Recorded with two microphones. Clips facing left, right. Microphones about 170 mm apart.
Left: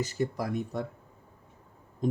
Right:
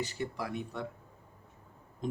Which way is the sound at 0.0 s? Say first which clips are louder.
Left 6 dB; 40° left (ahead or behind).